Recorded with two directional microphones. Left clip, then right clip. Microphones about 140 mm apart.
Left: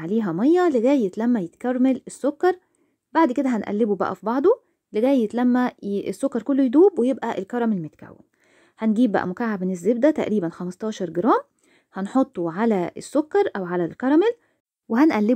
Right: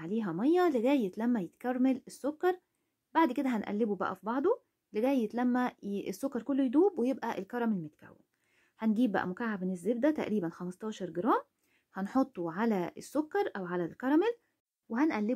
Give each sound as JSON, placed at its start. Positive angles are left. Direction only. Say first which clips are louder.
{"t": 0.0, "sound": "speech", "louder": "left 11 dB", "side_deg": 50}
{"t": 4.0, "sound": "speech", "louder": "left 11 dB", "side_deg": 55}
{"t": 13.0, "sound": "speech", "louder": "left 13 dB", "side_deg": 50}
{"t": 14.9, "sound": "speech", "louder": "left 12 dB", "side_deg": 70}